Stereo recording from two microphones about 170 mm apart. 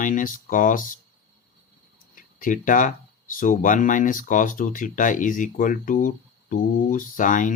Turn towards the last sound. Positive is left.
turn(degrees=50)  # may be behind; listen again after turning